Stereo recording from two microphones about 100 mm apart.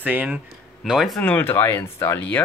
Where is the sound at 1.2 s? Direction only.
15° left (ahead or behind).